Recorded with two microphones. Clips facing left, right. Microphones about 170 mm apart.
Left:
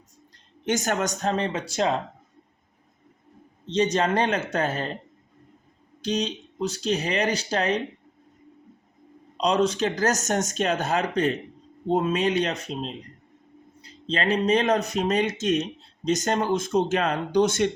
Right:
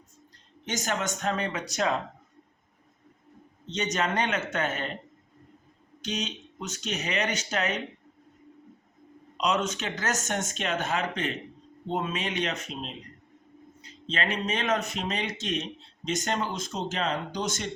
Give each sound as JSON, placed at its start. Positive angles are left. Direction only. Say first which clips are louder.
{"t": 0.6, "sound": "speech", "louder": "left 6 dB", "side_deg": 50}
{"t": 1.2, "sound": "speech", "louder": "left 4 dB", "side_deg": 30}
{"t": 3.7, "sound": "speech", "louder": "left 7 dB", "side_deg": 30}
{"t": 6.0, "sound": "speech", "louder": "left 7 dB", "side_deg": 35}
{"t": 9.4, "sound": "speech", "louder": "left 6 dB", "side_deg": 35}